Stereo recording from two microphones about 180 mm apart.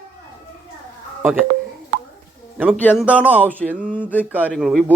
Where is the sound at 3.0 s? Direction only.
5° right (ahead or behind).